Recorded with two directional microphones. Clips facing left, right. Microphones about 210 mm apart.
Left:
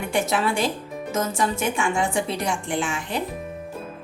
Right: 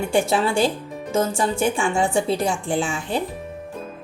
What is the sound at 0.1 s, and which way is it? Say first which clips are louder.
Speech: right 2 dB; 30° right (ahead or behind).